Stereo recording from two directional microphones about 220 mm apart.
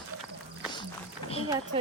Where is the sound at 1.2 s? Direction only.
25° left (ahead or behind).